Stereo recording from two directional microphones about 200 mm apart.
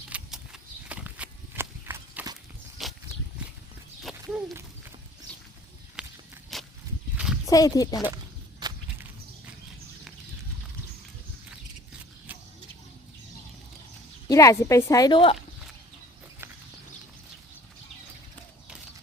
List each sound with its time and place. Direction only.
0.1 s horse: 5° right (ahead or behind)
2.8 s a sound: centre (ahead or behind)
4.0 s a sound: centre (ahead or behind)
6.0 s walk: 5° right (ahead or behind)
7.4 s speech: 20° left (ahead or behind)
8.6 s walk: 20° right (ahead or behind)
12.3 s vehicle: 10° right (ahead or behind)
14.3 s speech: 15° left (ahead or behind)